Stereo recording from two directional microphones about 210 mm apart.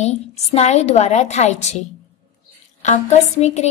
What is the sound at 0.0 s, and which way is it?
A woman's voice, 30° left (ahead or behind).